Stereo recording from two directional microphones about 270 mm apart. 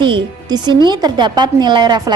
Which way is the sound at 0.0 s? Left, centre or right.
Centre.